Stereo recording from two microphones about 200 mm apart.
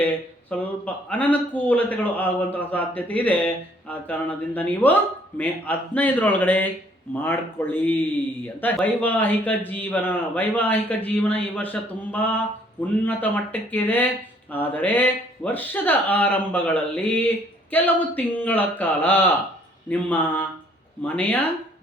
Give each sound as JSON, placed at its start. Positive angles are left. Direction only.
{"t": 0.5, "sound": "speech", "side_deg": 5}